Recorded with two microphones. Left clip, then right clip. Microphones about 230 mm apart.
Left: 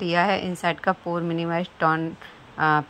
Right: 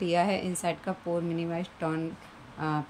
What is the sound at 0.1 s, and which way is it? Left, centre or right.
Speech, left.